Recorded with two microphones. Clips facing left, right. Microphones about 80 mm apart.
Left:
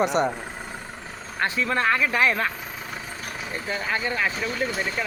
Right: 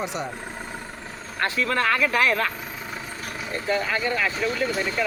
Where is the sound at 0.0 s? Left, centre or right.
Left.